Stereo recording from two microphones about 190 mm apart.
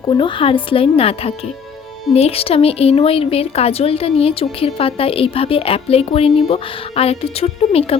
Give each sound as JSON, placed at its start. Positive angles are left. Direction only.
{"t": 0.0, "sound": "a woman's voice", "side_deg": 25}